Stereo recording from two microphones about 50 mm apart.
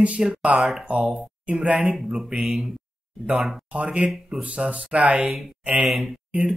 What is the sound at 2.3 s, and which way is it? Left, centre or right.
Speech, centre.